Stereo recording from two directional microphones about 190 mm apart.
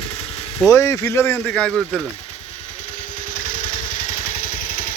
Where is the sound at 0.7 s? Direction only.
15° left (ahead or behind); by 2.1 s centre (ahead or behind).